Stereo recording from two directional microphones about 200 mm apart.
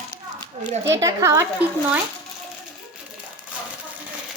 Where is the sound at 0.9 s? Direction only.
15° right (ahead or behind).